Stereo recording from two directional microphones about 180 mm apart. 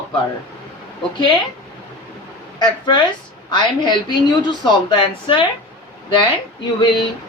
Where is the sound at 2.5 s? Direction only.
25° left (ahead or behind).